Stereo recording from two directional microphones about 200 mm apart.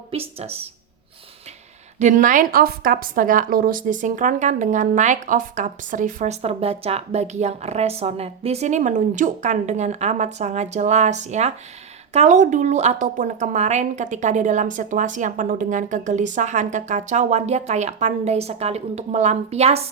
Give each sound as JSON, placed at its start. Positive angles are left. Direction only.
{"t": 0.1, "sound": "a woman's voice", "side_deg": -30}
{"t": 2.0, "sound": "a woman's voice", "side_deg": -40}